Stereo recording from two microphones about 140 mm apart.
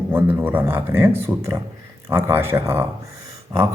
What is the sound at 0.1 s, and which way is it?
A man's voice, 15° right (ahead or behind).